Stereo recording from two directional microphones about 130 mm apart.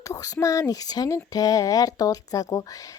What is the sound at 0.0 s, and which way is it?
Speech, 25° left (ahead or behind).